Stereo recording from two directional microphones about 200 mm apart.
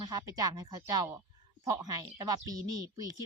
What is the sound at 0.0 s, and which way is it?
Speech, 20° right (ahead or behind).